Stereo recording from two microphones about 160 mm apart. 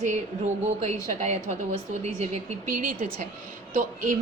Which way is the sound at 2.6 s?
55° right (ahead or behind).